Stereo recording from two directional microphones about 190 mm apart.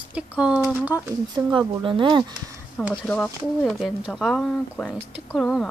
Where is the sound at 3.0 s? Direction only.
5° left (ahead or behind).